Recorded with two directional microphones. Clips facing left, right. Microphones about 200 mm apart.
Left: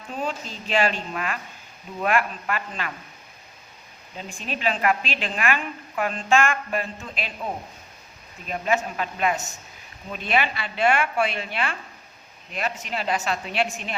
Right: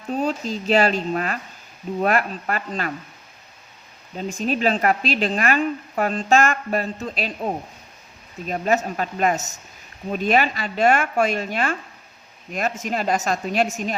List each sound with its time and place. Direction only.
0.1 s a woman's voice: 40° right (ahead or behind)
4.2 s a woman's voice: 40° right (ahead or behind)